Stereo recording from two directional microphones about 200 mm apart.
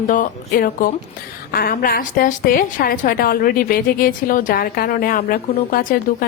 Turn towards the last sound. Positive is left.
turn(degrees=45)  # may be behind; listen again after turning